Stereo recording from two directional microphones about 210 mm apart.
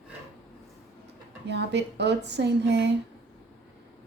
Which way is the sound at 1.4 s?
55° right (ahead or behind).